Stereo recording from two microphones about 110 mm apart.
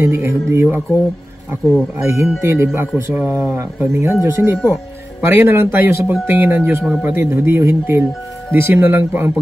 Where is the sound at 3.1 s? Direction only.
10° right (ahead or behind).